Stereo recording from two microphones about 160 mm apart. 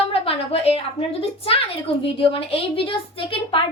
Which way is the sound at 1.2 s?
35° left (ahead or behind).